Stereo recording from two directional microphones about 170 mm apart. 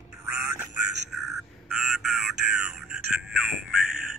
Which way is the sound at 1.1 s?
Centre (ahead or behind).